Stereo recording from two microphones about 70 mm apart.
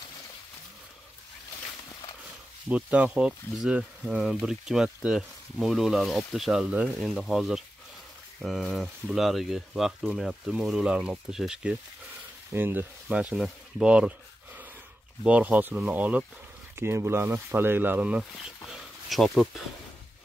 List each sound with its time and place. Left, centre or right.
2.7 s speech: centre
4.5 s speech: centre
12.5 s speech: right
13.1 s speech: centre
15.2 s speech: right
16.7 s speech: right; by 18.2 s centre
18.4 s speech: centre